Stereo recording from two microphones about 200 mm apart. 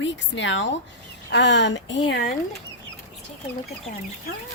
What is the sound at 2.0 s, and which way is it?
Speech, 50° left (ahead or behind).